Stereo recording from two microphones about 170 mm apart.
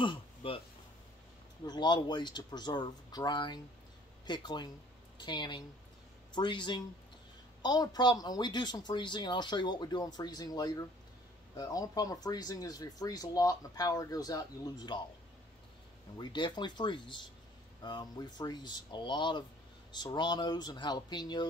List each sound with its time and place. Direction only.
0.0 s speech: 30° left (ahead or behind)
1.7 s a woman's voice: 25° left (ahead or behind)
16.2 s speech: 25° left (ahead or behind)